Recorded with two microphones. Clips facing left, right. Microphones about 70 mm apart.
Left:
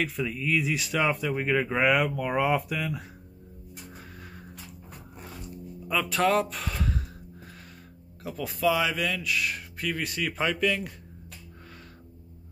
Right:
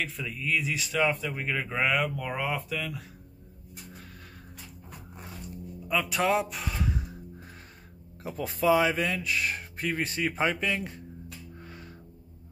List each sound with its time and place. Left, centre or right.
0.0 s speech: centre
5.9 s speech: centre
8.2 s speech: right